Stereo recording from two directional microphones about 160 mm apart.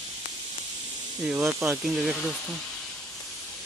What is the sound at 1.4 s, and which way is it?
Speech, 15° right (ahead or behind).